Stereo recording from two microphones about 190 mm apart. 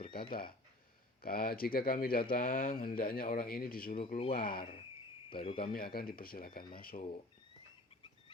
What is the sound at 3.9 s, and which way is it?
Speech, 30° left (ahead or behind).